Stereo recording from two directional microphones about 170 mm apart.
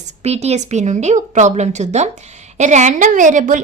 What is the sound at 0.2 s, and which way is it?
A woman's voice, 40° right (ahead or behind).